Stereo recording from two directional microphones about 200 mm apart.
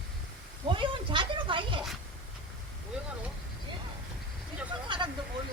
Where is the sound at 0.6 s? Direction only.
25° right (ahead or behind).